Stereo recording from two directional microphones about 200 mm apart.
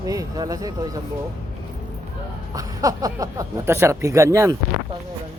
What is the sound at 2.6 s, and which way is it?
Speech, 15° right (ahead or behind).